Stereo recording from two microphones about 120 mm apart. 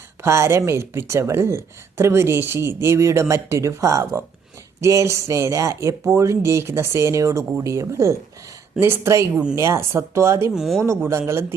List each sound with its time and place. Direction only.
0.2 s speech: 20° right (ahead or behind)
9.3 s speech: 10° right (ahead or behind)
9.6 s speech: 25° right (ahead or behind)
10.5 s speech: centre (ahead or behind)
10.8 s speech: 20° right (ahead or behind)